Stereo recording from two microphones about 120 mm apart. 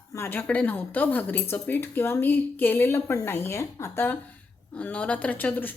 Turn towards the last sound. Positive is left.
turn(degrees=15)  # may be behind; listen again after turning